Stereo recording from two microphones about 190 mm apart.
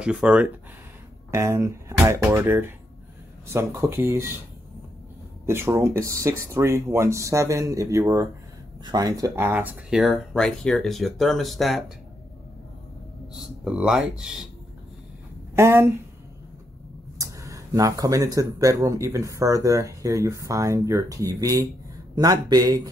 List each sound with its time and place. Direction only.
0.0 s speech: 5° right (ahead or behind)
5.5 s speech: 15° right (ahead or behind)
13.4 s speech: 5° right (ahead or behind)
15.5 s speech: 15° right (ahead or behind)
17.2 s speech: 15° right (ahead or behind)